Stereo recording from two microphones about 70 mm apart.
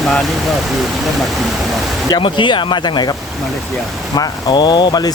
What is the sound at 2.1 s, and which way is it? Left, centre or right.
Speech, left.